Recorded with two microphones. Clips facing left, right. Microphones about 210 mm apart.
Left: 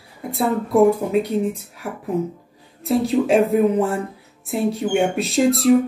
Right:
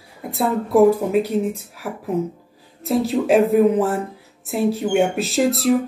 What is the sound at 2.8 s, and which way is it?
Speech, centre (ahead or behind).